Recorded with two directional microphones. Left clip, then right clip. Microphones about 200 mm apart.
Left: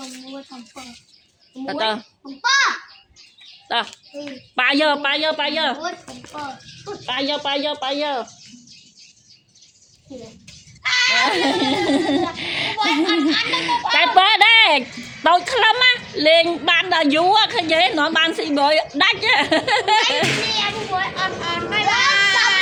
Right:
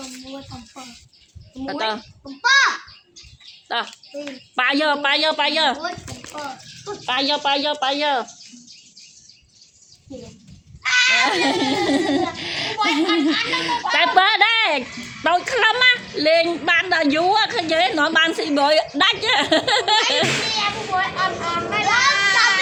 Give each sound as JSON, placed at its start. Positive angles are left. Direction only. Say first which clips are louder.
{"t": 1.6, "sound": "a child's voice", "louder": "left 2 dB", "side_deg": 10}
{"t": 2.4, "sound": "speech", "louder": "right 2 dB", "side_deg": -10}
{"t": 3.7, "sound": "a child's voice", "louder": "left 2 dB", "side_deg": 10}
{"t": 5.1, "sound": "speech", "louder": "right 2 dB", "side_deg": -5}
{"t": 10.8, "sound": "giggle", "louder": "even", "side_deg": 15}
{"t": 13.5, "sound": "speech", "louder": "left 2 dB", "side_deg": 0}
{"t": 20.6, "sound": "a child's voice", "louder": "even", "side_deg": 15}
{"t": 21.8, "sound": "children playing", "louder": "even", "side_deg": -10}